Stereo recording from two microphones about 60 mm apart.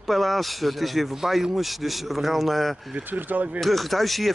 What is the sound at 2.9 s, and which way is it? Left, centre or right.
Speech, right.